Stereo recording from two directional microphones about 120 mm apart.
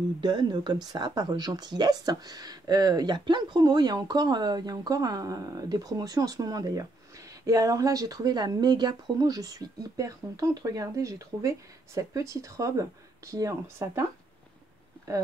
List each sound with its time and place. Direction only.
0.2 s speech: 35° right (ahead or behind)